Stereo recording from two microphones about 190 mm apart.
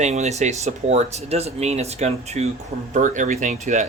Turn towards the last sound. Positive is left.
turn(degrees=-40)  # may be behind; listen again after turning